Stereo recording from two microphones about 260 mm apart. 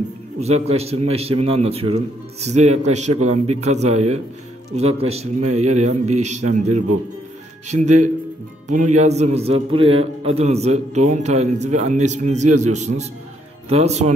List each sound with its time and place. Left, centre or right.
0.4 s a man's voice: right